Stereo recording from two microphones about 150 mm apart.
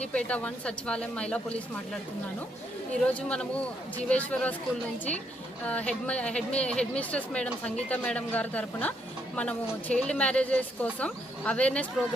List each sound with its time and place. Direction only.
0.0 s speech: 5° left (ahead or behind)
5.6 s speech: 10° left (ahead or behind)